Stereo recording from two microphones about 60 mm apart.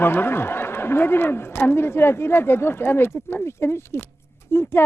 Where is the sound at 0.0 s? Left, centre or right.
Left.